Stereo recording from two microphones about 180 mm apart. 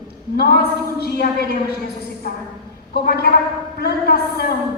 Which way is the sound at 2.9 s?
60° left (ahead or behind).